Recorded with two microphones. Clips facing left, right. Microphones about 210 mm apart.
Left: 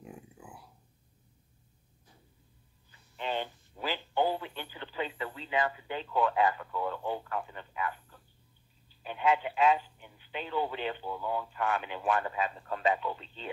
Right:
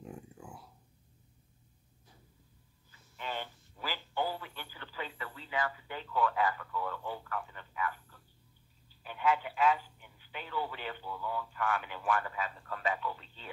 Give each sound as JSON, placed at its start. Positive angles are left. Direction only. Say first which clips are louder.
{"t": 0.0, "sound": "a sound", "louder": "right 1 dB", "side_deg": 5}
{"t": 3.2, "sound": "radio", "louder": "left 6 dB", "side_deg": 25}
{"t": 8.8, "sound": "a man's voice", "louder": "left 3 dB", "side_deg": 20}